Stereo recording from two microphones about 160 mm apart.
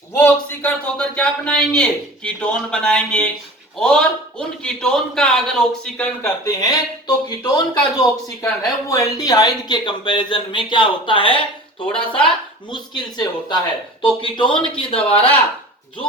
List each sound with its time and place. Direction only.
0.1 s a man's voice: 10° left (ahead or behind)
6.2 s speech: 20° left (ahead or behind)
11.9 s a man's voice: 5° left (ahead or behind)
12.6 s speech: 25° left (ahead or behind)